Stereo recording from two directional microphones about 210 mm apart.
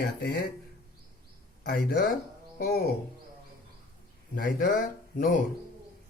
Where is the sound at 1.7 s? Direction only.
45° left (ahead or behind).